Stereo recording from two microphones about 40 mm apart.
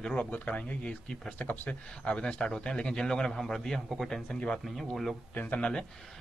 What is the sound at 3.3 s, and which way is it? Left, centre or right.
Speech, centre.